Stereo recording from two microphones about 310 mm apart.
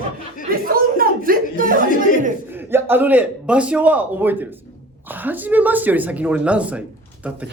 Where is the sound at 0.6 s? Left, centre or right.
Right.